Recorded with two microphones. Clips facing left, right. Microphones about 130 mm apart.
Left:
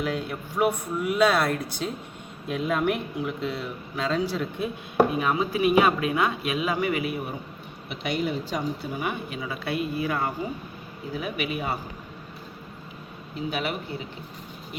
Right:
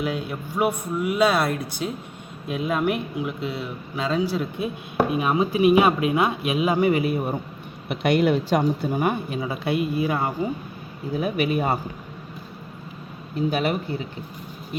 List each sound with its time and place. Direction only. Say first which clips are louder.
0.0 s speech: right 2 dB; 5° right (ahead or behind)
5.2 s speech: right 4 dB; 20° right (ahead or behind)
7.9 s speech: right 8 dB; 60° right (ahead or behind); by 9.6 s 35° right (ahead or behind)
9.6 s speech: right 4 dB; 20° right (ahead or behind)
11.2 s speech: right 7 dB; 35° right (ahead or behind)
13.5 s speech: right 5 dB; 40° right (ahead or behind)